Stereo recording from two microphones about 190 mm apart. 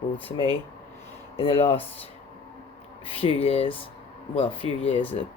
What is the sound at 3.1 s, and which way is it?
Speech, 30° left (ahead or behind).